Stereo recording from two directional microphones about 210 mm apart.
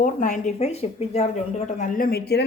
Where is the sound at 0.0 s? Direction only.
40° left (ahead or behind).